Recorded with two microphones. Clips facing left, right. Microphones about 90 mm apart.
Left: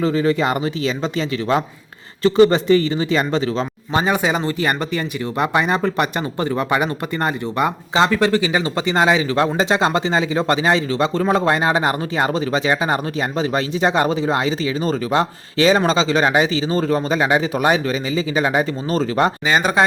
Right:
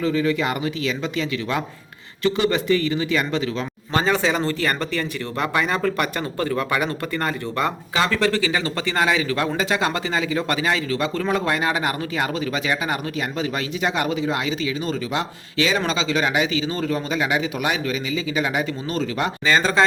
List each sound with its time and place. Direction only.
0.0 s speech: 35° left (ahead or behind)
3.9 s speech: 15° left (ahead or behind); by 19.3 s 40° left (ahead or behind)
19.5 s speech: 20° left (ahead or behind)